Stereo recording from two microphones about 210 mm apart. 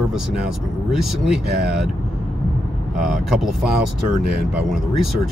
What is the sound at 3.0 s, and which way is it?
Speech, centre (ahead or behind).